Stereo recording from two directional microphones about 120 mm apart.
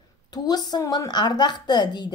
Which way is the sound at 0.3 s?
35° left (ahead or behind).